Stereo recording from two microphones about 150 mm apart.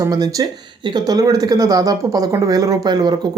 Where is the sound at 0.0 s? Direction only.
25° right (ahead or behind).